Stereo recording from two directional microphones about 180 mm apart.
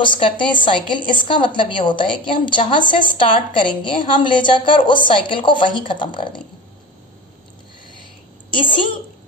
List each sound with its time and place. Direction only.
0.0 s a woman's voice: 25° left (ahead or behind)